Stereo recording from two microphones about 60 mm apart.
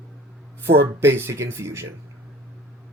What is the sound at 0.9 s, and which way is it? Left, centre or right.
Speech, right.